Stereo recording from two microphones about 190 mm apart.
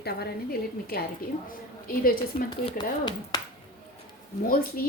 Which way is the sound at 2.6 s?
20° left (ahead or behind).